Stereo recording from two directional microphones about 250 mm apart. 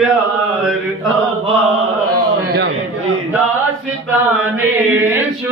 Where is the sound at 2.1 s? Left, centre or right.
Right.